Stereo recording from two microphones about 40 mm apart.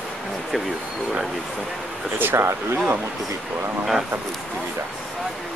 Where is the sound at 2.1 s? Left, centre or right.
Right.